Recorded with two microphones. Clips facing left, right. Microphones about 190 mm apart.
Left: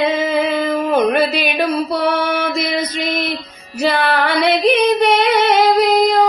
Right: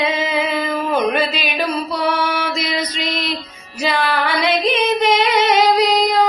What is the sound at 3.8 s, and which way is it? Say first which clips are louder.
Singing: left 3 dB; 55° left (ahead or behind).